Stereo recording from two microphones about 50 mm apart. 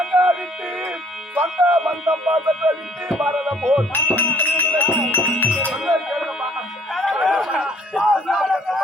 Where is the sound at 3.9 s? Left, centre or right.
Left.